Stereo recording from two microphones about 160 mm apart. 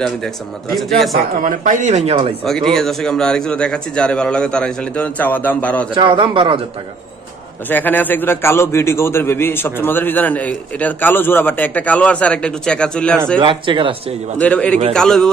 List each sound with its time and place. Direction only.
0.7 s a man's voice: centre (ahead or behind)
1.4 s speech: 55° right (ahead or behind)
2.4 s a man's voice: centre (ahead or behind)
5.9 s speech: 30° right (ahead or behind)
7.6 s a man's voice: 10° left (ahead or behind)
13.4 s speech: 30° right (ahead or behind)
14.4 s a man's voice: 10° left (ahead or behind)